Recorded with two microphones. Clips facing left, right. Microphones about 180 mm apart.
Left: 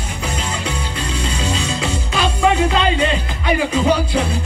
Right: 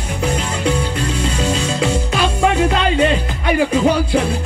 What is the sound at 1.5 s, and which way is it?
Music, 50° right (ahead or behind).